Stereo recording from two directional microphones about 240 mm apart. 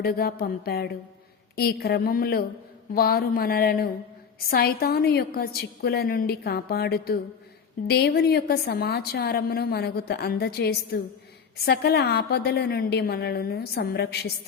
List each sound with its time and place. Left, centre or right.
0.0 s a woman's voice: left